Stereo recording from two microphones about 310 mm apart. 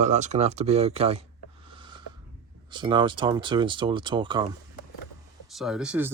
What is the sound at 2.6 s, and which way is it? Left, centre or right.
Speech, centre.